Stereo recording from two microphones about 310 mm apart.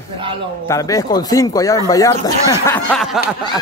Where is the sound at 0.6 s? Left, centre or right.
Centre.